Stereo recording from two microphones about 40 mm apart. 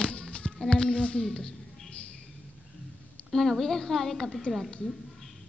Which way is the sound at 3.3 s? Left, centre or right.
Centre.